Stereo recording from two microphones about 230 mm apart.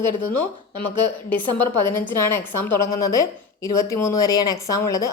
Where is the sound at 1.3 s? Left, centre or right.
Right.